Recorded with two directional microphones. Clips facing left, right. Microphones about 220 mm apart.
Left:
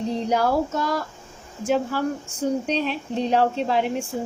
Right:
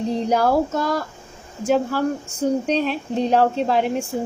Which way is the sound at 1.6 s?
45° right (ahead or behind).